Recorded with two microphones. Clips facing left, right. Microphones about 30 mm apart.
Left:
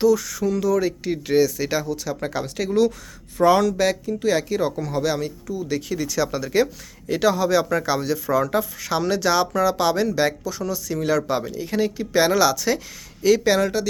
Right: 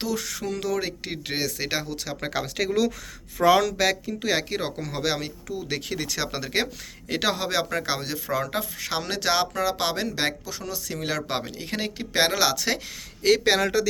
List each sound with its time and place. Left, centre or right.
0.0 s speech: right
2.3 s speech: right
5.9 s speech: right
7.9 s speech: right
11.3 s speech: right
12.3 s speech: right
12.5 s speech: right
13.5 s speech: right